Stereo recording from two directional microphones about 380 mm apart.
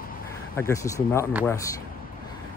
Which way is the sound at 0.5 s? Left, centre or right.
Centre.